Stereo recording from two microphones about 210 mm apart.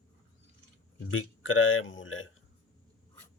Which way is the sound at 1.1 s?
70° left (ahead or behind).